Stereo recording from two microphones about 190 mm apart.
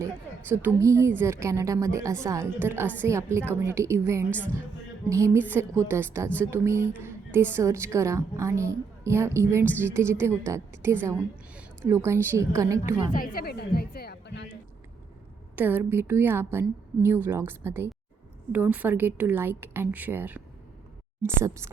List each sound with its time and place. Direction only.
0.0 s a woman's voice: 15° right (ahead or behind)
13.1 s speech: 50° left (ahead or behind)
15.5 s a woman's voice: 10° right (ahead or behind)